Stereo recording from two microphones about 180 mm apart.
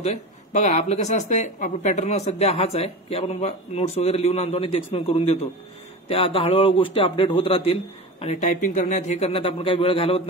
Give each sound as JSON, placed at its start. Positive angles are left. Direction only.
{"t": 0.0, "sound": "speech", "side_deg": 40}